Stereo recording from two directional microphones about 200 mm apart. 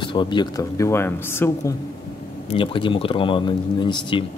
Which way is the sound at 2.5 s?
25° left (ahead or behind).